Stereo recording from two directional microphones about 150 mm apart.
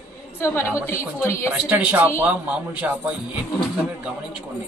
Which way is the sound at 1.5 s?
10° right (ahead or behind).